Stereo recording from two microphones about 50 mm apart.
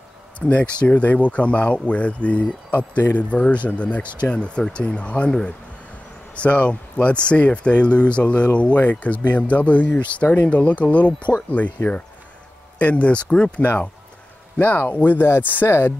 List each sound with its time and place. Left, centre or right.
0.5 s speech: left
6.3 s speech: left
14.6 s speech: left